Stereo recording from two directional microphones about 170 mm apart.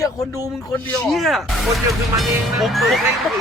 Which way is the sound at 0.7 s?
5° left (ahead or behind).